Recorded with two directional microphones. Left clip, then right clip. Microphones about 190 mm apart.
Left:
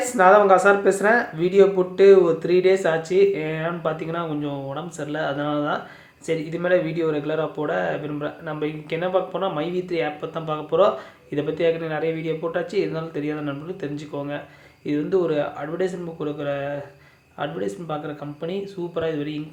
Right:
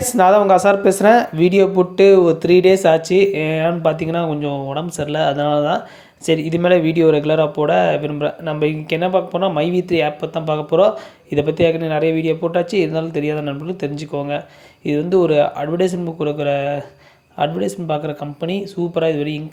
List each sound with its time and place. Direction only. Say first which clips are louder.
0.0 s speech: right 3 dB; 30° right (ahead or behind)